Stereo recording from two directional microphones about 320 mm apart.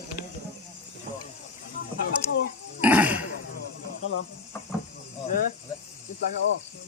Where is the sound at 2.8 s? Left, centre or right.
Centre.